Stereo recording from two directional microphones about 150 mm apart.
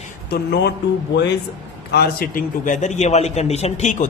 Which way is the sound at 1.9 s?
75° left (ahead or behind).